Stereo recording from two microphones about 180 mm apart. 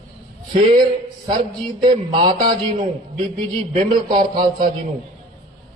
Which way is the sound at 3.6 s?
45° right (ahead or behind).